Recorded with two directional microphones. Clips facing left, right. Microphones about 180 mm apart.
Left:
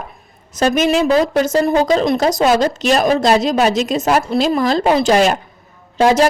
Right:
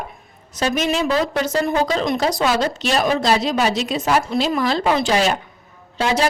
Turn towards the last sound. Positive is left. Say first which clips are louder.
# left 7 dB
turn(degrees=45)  # may be behind; listen again after turning